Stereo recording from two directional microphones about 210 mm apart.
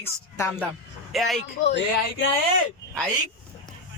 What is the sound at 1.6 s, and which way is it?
Speech, 60° left (ahead or behind).